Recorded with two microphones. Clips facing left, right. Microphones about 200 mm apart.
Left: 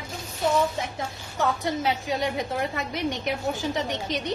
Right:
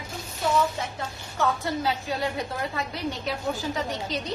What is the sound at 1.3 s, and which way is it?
A woman's voice, 20° left (ahead or behind).